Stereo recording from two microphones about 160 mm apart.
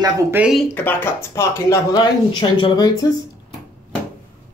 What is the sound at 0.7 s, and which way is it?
Speech, 15° left (ahead or behind).